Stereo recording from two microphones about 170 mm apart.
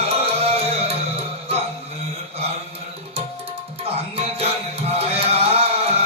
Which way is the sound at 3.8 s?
35° right (ahead or behind).